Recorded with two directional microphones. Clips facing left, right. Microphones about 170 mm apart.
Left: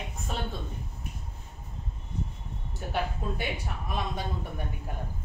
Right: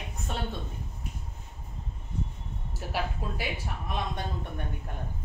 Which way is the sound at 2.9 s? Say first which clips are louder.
Left 2 dB; 5° right (ahead or behind).